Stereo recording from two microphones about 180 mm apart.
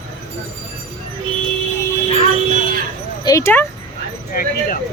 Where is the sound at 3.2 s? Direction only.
15° left (ahead or behind).